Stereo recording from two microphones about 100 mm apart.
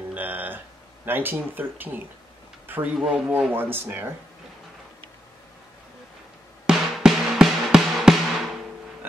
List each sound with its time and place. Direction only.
0.1 s music: 15° right (ahead or behind)
1.0 s speech: 20° right (ahead or behind)
6.6 s music: 5° right (ahead or behind)